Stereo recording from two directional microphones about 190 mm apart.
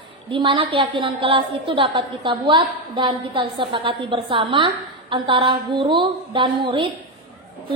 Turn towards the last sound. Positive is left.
turn(degrees=-25)  # may be behind; listen again after turning